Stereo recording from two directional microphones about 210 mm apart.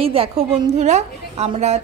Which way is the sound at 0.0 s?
25° right (ahead or behind).